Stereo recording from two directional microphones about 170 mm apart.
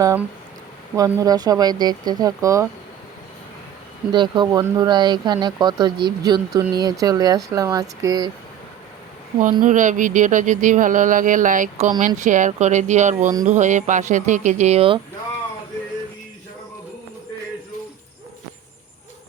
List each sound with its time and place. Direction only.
0.9 s speech: 20° right (ahead or behind)
4.1 s speech: 25° right (ahead or behind)
9.4 s speech: 50° right (ahead or behind); by 15.0 s 30° right (ahead or behind)